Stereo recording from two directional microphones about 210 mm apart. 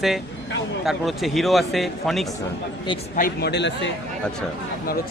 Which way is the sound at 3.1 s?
45° left (ahead or behind).